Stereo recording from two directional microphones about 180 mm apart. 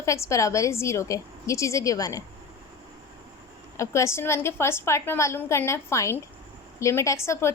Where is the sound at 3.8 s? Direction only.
15° left (ahead or behind).